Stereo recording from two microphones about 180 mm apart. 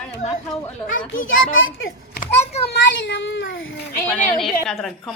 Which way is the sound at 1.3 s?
90° left.